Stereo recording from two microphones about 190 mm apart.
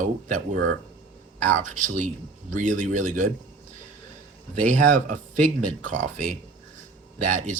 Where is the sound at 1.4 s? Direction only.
40° right (ahead or behind).